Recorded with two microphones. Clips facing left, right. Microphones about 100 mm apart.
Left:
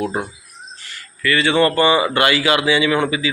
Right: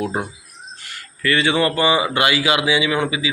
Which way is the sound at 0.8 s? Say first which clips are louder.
Right 1 dB; 55° right (ahead or behind).